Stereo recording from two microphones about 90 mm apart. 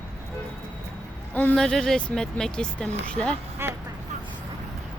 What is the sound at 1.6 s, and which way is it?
Speech, 5° left (ahead or behind).